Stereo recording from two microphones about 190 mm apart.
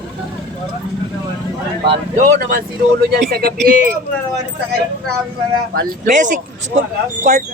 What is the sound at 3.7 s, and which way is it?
Speech, 45° right (ahead or behind).